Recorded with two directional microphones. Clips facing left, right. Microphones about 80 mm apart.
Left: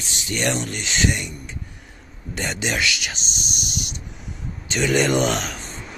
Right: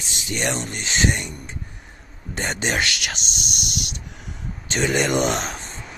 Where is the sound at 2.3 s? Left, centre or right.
Right.